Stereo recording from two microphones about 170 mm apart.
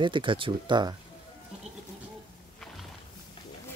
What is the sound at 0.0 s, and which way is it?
Speech, 30° right (ahead or behind).